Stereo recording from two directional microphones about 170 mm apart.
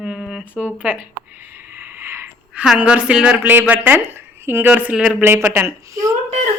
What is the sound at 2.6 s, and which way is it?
A woman's voice, 5° right (ahead or behind).